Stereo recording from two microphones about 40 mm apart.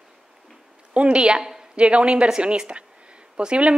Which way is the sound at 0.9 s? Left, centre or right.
Right.